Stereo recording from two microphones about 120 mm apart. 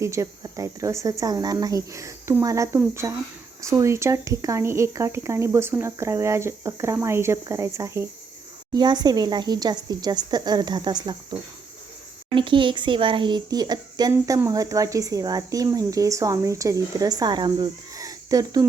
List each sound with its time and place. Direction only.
0.0 s speech: 25° right (ahead or behind)
8.7 s speech: 35° right (ahead or behind)
14.1 s speech: 25° right (ahead or behind)